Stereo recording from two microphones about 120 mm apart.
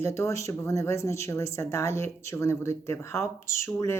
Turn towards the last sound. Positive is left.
turn(degrees=25)  # may be behind; listen again after turning